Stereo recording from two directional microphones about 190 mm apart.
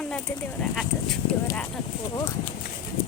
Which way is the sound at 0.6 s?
Centre (ahead or behind).